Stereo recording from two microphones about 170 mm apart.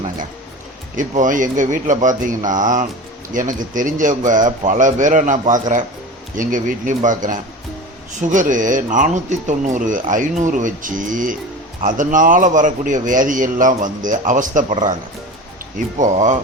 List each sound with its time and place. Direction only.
0.9 s a man's voice: 50° right (ahead or behind)
16.0 s a man's voice: 45° right (ahead or behind)